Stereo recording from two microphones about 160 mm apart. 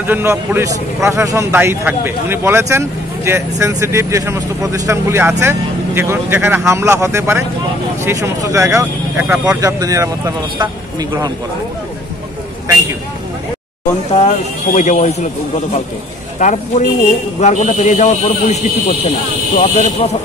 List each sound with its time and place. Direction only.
0.0 s a man's voice: 15° right (ahead or behind)
14.1 s speech: 45° left (ahead or behind)
16.3 s speech: 50° left (ahead or behind)